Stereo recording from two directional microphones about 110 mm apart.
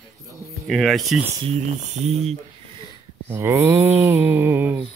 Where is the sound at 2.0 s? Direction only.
70° right (ahead or behind).